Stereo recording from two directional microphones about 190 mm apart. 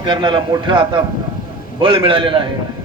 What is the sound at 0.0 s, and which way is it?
A man's voice, 25° right (ahead or behind).